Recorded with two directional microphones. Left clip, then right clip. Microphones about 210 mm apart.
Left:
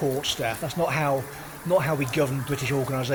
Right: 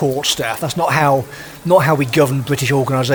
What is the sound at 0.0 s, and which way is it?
Speech, 55° right (ahead or behind).